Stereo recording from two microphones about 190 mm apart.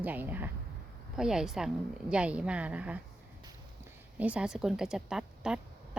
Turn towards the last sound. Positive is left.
turn(degrees=-5)  # may be behind; listen again after turning